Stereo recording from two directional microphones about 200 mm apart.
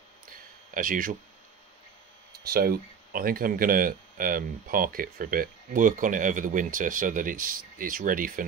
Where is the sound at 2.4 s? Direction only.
50° right (ahead or behind).